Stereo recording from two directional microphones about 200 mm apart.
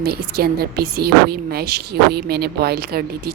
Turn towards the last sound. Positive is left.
turn(degrees=-50)  # may be behind; listen again after turning